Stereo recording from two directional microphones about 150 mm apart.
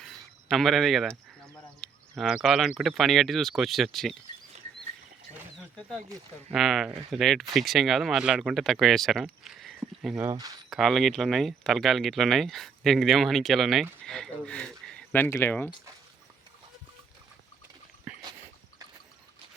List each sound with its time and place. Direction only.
0.0 s a sound: centre (ahead or behind)
1.8 s speech: centre (ahead or behind)
6.5 s speech: centre (ahead or behind)
10.2 s speech: 20° right (ahead or behind)
10.7 s speech: centre (ahead or behind)
18.1 s a sound: 10° right (ahead or behind)